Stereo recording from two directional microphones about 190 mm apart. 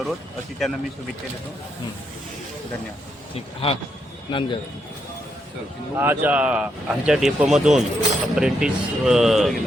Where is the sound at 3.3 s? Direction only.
30° left (ahead or behind).